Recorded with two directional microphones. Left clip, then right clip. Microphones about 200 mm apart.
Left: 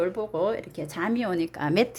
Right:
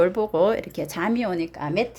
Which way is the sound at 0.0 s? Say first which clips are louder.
Right 7 dB; 30° right (ahead or behind).